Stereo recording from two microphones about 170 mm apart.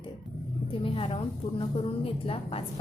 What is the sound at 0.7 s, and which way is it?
A woman's voice, 30° left (ahead or behind).